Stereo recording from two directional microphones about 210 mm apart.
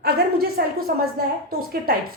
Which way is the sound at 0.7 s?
45° right (ahead or behind).